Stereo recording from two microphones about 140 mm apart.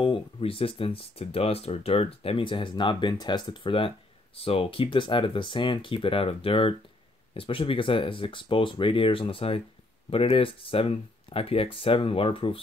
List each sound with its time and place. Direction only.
0.0 s speech: 40° left (ahead or behind)